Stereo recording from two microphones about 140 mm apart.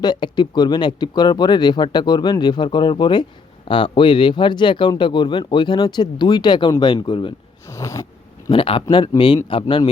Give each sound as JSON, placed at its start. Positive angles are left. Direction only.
{"t": 0.0, "sound": "speech", "side_deg": 35}
{"t": 7.7, "sound": "a sound", "side_deg": 20}
{"t": 8.4, "sound": "speech", "side_deg": 40}